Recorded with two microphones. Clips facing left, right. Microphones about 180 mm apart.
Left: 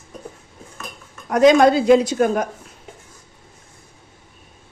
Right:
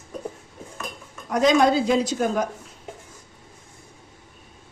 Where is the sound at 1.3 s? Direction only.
60° left (ahead or behind).